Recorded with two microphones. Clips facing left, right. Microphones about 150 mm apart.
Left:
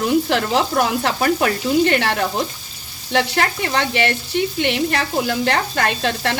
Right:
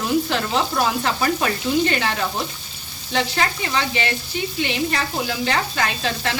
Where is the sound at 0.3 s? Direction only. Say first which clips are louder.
Left 4 dB; 65° left (ahead or behind).